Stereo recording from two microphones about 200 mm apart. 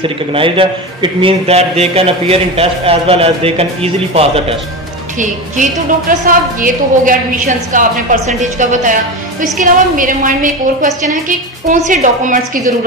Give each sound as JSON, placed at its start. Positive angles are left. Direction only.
{"t": 0.0, "sound": "a man's voice", "side_deg": -25}
{"t": 5.2, "sound": "a woman's voice", "side_deg": -40}